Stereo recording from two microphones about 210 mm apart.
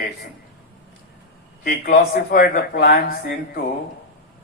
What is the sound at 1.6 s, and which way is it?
Speech, 50° left (ahead or behind).